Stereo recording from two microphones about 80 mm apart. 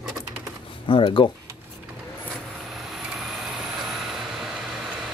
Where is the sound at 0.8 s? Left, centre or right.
Left.